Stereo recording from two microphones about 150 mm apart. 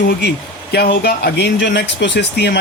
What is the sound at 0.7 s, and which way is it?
Speech, 90° left.